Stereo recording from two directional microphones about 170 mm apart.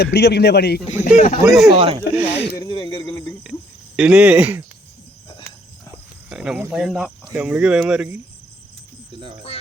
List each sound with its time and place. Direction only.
0.0 s a man's voice: 80° left
1.1 s speech: 45° left (ahead or behind)
1.5 s speech: centre (ahead or behind)
2.0 s speech: 75° left (ahead or behind)
2.6 s a sound: 25° left (ahead or behind)
3.9 s speech: 5° right (ahead or behind)
6.3 s speech: 5° right (ahead or behind)